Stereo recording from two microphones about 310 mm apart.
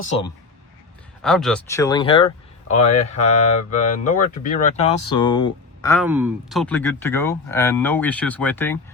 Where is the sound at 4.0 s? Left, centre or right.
Left.